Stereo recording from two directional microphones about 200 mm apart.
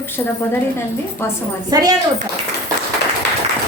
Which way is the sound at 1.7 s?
20° right (ahead or behind).